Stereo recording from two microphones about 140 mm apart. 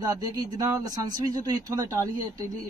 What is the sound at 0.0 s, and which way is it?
Speech, 25° right (ahead or behind).